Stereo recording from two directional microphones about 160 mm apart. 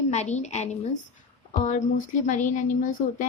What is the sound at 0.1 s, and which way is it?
Speech, 45° left (ahead or behind).